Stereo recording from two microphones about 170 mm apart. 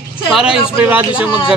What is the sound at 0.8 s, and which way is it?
Speech, 10° right (ahead or behind).